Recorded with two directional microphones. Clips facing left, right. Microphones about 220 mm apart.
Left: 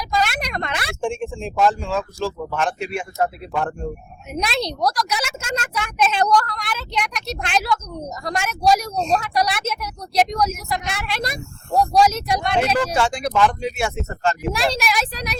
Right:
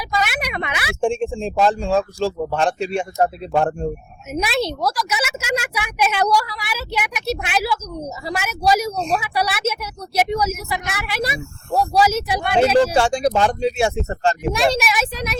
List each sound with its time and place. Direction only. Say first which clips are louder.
0.1 s a sound: left 1 dB; 5° right (ahead or behind)
1.0 s speech: right 6 dB; 30° right (ahead or behind)
4.3 s a woman's voice: right 3 dB; 5° right (ahead or behind)
12.7 s speech: right 5 dB; 30° right (ahead or behind)
14.5 s speech: right 3 dB; centre (ahead or behind)